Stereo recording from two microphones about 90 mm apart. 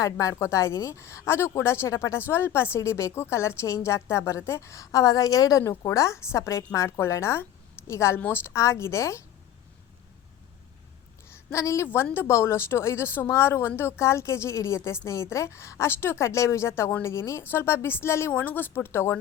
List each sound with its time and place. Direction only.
0.0 s a woman's voice: 35° left (ahead or behind)
11.3 s a sound: 35° left (ahead or behind)
12.1 s a woman's voice: 30° left (ahead or behind)